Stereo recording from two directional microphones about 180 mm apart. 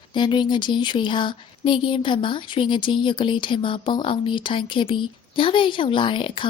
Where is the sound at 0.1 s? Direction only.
25° left (ahead or behind).